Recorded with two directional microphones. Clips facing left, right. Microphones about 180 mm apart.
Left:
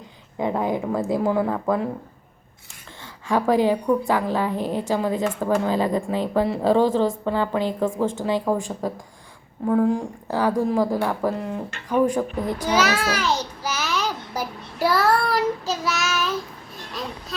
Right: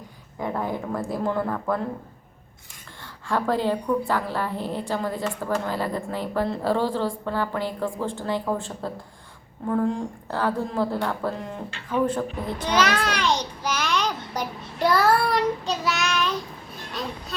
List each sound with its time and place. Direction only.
0.3 s a woman's voice: 20° left (ahead or behind)
3.2 s a woman's voice: 15° left (ahead or behind)
12.6 s a sound: 5° left (ahead or behind)